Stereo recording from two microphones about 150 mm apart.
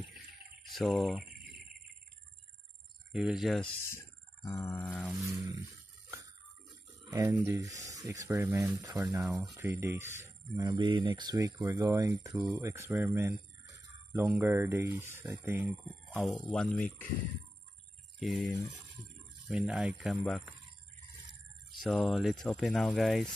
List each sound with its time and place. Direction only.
0.7 s speech: centre (ahead or behind)
3.1 s speech: 5° right (ahead or behind)
3.8 s a sound: 15° left (ahead or behind)
7.1 s speech: 25° right (ahead or behind)
10.6 s speech: 30° right (ahead or behind)
16.3 s speech: centre (ahead or behind)
18.2 s speech: centre (ahead or behind)
21.7 s speech: centre (ahead or behind)